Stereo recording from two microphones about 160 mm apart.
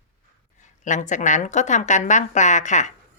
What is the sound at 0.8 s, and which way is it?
Speech, 50° left (ahead or behind).